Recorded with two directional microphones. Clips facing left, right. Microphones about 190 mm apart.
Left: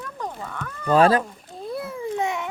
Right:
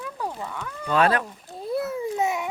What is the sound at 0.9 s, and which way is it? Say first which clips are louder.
Speech: left 4 dB; 30° left (ahead or behind).